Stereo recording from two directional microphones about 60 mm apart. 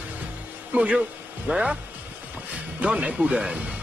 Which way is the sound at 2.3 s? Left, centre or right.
Right.